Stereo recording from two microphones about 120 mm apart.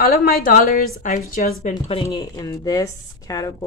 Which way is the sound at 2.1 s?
35° left (ahead or behind).